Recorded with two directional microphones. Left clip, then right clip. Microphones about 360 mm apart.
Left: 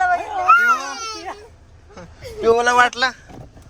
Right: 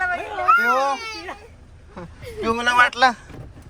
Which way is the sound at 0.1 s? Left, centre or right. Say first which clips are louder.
Left 6 dB; left.